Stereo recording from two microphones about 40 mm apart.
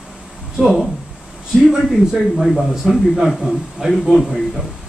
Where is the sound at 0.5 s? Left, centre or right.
Centre.